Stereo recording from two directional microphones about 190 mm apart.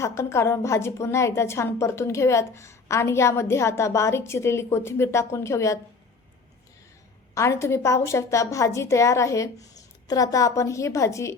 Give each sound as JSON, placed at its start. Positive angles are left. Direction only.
{"t": 0.0, "sound": "a woman's voice", "side_deg": 15}
{"t": 7.3, "sound": "a woman's voice", "side_deg": 15}